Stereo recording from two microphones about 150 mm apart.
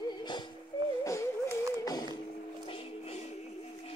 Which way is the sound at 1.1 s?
20° left (ahead or behind).